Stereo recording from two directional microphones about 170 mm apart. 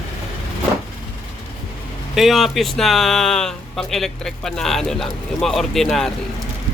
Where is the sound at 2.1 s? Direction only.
Centre (ahead or behind).